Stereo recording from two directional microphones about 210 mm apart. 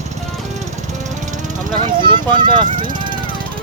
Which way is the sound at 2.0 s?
20° right (ahead or behind).